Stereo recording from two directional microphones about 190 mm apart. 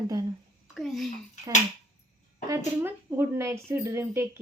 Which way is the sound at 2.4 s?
15° right (ahead or behind).